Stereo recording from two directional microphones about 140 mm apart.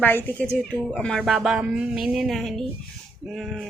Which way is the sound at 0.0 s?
15° left (ahead or behind).